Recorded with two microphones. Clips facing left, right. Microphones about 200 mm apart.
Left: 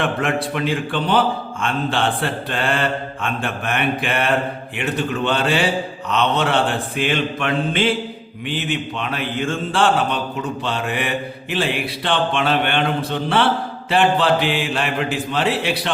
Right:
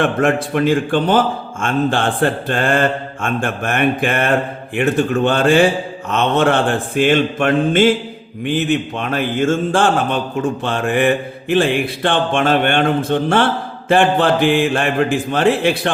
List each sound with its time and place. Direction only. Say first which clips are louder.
0.0 s speech: right 5 dB; 45° right (ahead or behind)